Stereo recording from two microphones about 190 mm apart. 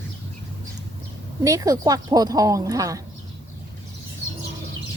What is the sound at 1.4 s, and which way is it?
Speech, 20° right (ahead or behind).